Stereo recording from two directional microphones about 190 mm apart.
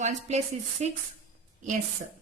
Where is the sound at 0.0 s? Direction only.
35° right (ahead or behind).